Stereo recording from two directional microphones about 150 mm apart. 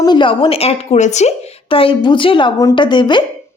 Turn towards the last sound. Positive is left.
turn(degrees=30)  # may be behind; listen again after turning